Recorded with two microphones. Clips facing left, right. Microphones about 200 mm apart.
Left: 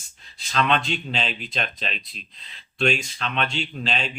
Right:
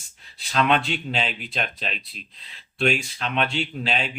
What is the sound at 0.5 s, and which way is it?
Speech, 10° right (ahead or behind).